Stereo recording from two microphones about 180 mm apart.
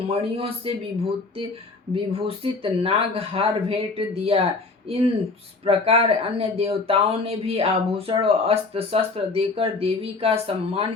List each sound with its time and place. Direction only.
0.1 s speech: 30° right (ahead or behind)
2.1 s speech: 30° right (ahead or behind)